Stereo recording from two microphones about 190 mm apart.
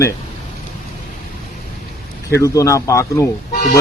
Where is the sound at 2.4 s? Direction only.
15° left (ahead or behind).